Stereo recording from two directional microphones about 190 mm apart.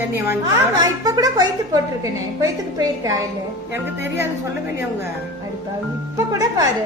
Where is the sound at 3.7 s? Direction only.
10° right (ahead or behind).